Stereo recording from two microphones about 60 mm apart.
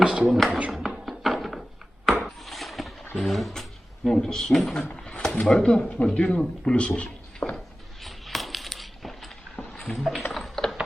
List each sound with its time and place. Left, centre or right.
0.0 s speech: centre
0.3 s speech: centre
0.7 s music: centre
2.2 s a sound: centre
4.1 s speech: centre
8.0 s a sound: centre
9.7 s music: centre
10.3 s typing: centre